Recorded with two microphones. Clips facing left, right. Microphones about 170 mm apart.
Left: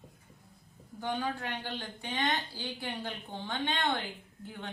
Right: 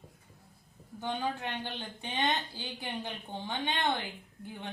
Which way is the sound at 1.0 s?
20° right (ahead or behind).